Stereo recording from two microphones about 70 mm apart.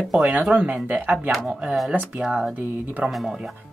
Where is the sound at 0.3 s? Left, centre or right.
Centre.